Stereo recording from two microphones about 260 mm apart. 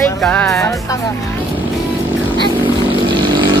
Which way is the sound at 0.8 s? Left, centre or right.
Centre.